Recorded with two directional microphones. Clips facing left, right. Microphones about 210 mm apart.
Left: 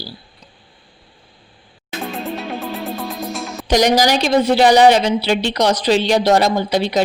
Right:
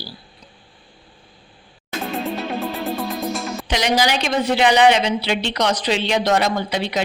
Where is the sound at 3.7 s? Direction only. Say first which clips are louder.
Left 6 dB; 40° left (ahead or behind).